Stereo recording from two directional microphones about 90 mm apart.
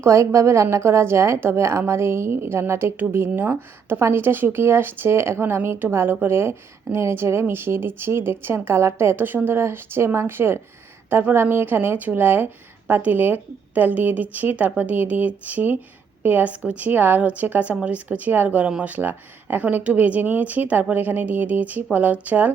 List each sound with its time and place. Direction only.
0.0 s a woman's voice: 30° right (ahead or behind)